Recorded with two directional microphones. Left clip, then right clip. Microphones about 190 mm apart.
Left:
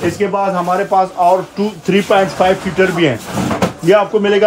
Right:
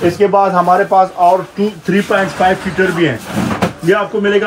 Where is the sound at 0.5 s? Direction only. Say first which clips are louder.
Right 5 dB; 20° right (ahead or behind).